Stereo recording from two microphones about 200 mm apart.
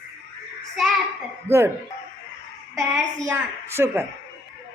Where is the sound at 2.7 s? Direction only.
15° right (ahead or behind).